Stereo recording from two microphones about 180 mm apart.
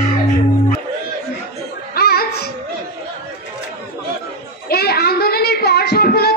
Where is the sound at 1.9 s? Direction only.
60° left (ahead or behind).